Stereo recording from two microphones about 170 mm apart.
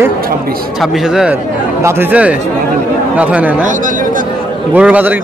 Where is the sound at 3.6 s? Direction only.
50° right (ahead or behind).